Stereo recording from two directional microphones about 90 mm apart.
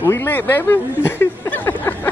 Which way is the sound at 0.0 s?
30° left (ahead or behind).